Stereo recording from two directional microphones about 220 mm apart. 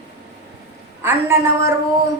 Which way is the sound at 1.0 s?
10° right (ahead or behind).